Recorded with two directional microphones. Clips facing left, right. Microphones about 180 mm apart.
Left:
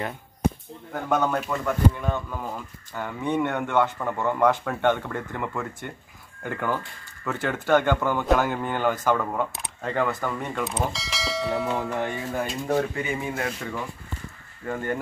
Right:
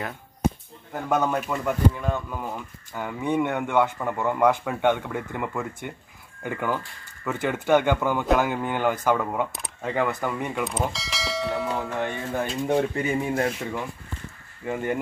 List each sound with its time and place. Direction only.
1.0 s speech: 5° right (ahead or behind)
12.9 s speech: 35° right (ahead or behind)
14.7 s speech: 10° right (ahead or behind)